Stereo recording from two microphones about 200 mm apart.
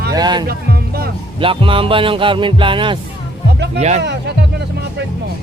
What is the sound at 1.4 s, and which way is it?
Speech, 25° right (ahead or behind).